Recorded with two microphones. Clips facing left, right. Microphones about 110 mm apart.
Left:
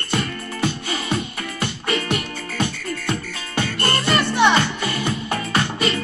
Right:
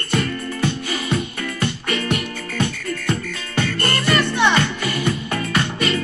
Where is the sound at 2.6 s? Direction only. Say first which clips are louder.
Right 1 dB; 30° left (ahead or behind).